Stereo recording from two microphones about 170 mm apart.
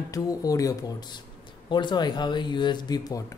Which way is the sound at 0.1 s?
20° left (ahead or behind).